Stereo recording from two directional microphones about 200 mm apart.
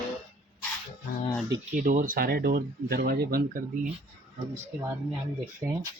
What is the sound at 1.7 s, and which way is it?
Speech, 45° right (ahead or behind).